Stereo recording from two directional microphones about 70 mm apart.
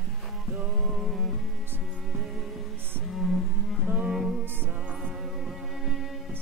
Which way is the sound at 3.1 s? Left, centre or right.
Centre.